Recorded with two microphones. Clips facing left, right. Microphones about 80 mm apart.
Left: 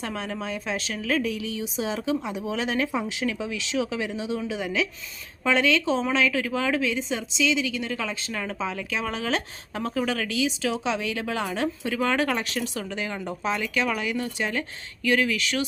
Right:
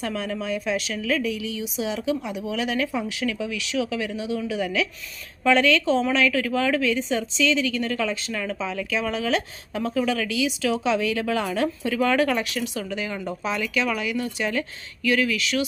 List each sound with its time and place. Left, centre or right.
0.0 s a woman's voice: left